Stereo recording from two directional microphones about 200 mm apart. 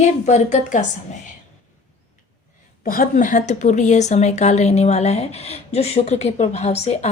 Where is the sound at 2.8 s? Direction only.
40° left (ahead or behind).